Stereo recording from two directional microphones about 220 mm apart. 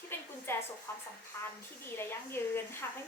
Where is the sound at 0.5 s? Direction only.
10° left (ahead or behind).